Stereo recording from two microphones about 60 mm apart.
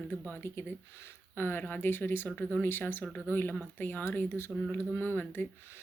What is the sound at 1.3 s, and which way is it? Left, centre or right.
Speech, left.